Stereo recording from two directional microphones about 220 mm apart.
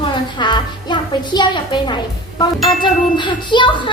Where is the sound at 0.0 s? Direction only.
20° left (ahead or behind).